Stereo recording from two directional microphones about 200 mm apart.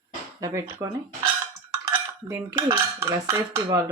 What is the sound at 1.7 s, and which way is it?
Dishes, 15° right (ahead or behind).